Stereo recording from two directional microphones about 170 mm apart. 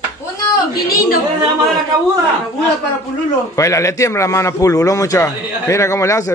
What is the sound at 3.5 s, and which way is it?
A man's voice, 20° left (ahead or behind).